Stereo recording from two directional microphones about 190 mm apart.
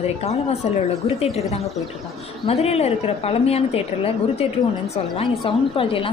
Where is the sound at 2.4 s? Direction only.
35° left (ahead or behind).